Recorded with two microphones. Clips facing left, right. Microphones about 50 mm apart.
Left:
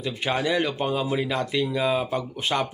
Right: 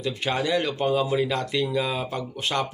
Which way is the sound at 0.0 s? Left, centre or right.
Centre.